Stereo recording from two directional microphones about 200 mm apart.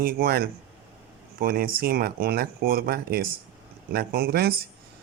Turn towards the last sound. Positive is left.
turn(degrees=-50)  # may be behind; listen again after turning